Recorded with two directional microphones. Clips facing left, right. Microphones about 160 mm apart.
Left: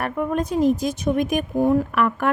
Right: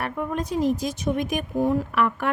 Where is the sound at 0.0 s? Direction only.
55° left (ahead or behind).